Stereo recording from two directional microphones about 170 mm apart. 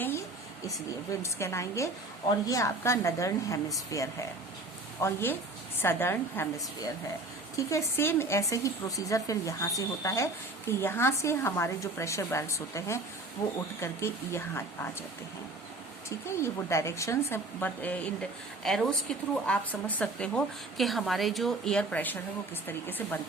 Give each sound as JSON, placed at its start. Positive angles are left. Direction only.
{"t": 1.2, "sound": "speech", "side_deg": 15}
{"t": 16.0, "sound": "speech", "side_deg": 15}